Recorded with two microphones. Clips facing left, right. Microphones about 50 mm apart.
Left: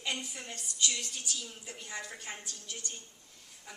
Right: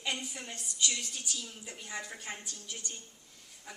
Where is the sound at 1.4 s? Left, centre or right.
Centre.